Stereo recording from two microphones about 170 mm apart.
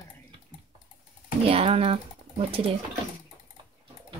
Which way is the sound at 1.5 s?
35° right (ahead or behind).